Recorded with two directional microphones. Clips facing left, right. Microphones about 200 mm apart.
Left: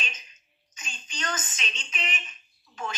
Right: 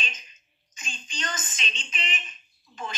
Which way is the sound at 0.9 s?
10° left (ahead or behind).